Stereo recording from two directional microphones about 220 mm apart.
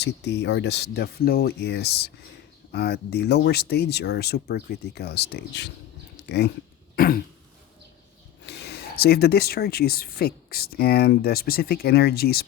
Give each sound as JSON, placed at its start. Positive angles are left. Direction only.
{"t": 0.0, "sound": "speech", "side_deg": 50}
{"t": 6.9, "sound": "throat clearing", "side_deg": 40}
{"t": 8.4, "sound": "speech", "side_deg": 50}